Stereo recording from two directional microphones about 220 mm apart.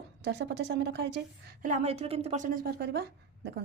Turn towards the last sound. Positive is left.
turn(degrees=-45)  # may be behind; listen again after turning